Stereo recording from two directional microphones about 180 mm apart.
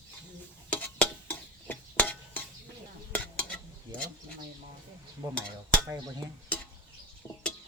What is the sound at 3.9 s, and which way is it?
Bird, 20° right (ahead or behind).